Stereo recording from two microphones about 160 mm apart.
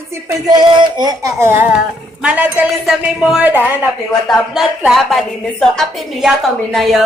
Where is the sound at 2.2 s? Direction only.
10° right (ahead or behind).